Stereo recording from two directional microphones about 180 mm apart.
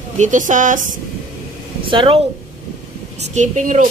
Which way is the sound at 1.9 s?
30° right (ahead or behind).